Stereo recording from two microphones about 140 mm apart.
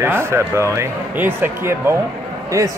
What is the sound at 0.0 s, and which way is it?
Speech, 15° right (ahead or behind).